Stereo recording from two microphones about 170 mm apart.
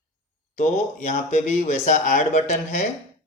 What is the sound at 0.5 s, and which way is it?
Speech, 45° left (ahead or behind).